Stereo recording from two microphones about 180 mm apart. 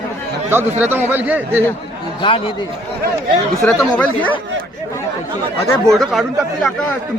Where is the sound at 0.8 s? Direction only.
10° right (ahead or behind).